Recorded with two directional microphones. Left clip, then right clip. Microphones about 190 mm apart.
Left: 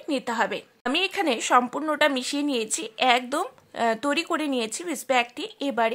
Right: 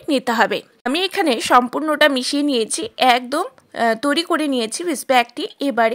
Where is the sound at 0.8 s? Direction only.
30° right (ahead or behind).